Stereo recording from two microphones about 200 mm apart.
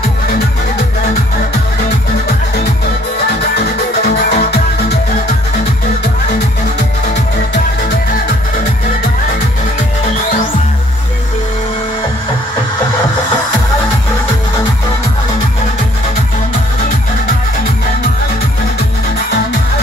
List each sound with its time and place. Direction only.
4.3 s music: 50° left (ahead or behind)